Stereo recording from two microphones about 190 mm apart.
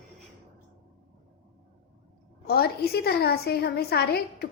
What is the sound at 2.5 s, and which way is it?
A woman's voice, 55° left (ahead or behind).